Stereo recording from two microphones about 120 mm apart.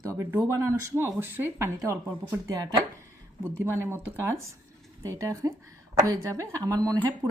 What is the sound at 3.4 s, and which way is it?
Speech, 20° right (ahead or behind).